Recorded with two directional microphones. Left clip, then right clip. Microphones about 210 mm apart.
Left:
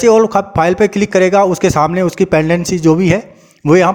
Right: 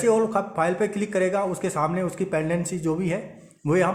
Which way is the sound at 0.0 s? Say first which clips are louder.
Left 12 dB; 40° left (ahead or behind).